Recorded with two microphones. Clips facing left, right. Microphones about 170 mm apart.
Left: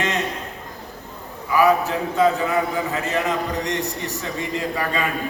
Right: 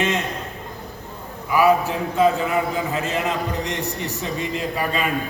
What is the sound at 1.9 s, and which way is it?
A man's voice, 20° right (ahead or behind).